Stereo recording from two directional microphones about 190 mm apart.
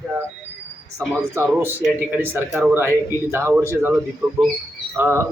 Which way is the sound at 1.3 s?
10° right (ahead or behind).